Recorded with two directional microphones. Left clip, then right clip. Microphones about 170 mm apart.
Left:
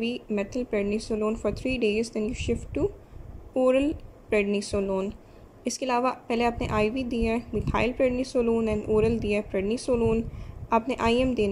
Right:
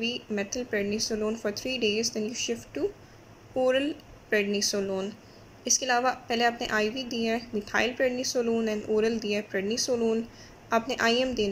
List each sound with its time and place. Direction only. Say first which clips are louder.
0.0 s a woman's voice: left 1 dB; 15° left (ahead or behind)